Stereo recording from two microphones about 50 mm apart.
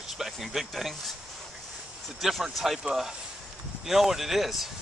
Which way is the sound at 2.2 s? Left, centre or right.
Centre.